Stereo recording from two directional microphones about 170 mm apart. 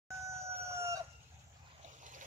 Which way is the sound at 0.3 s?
15° right (ahead or behind).